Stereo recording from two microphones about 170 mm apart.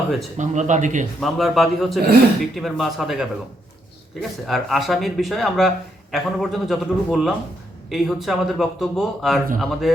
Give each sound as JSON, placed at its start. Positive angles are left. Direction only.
{"t": 0.3, "sound": "speech", "side_deg": -45}
{"t": 1.2, "sound": "speech", "side_deg": 0}